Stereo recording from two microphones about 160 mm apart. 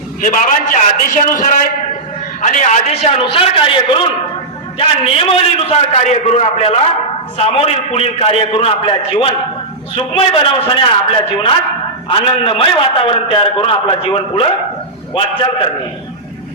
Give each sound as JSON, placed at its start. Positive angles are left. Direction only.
{"t": 0.2, "sound": "a man's voice", "side_deg": 55}